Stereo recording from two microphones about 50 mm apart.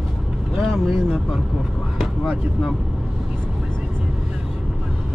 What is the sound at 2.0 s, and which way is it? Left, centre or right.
Speech, centre.